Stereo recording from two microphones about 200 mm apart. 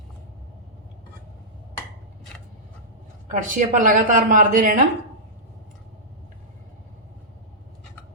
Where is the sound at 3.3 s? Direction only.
40° right (ahead or behind).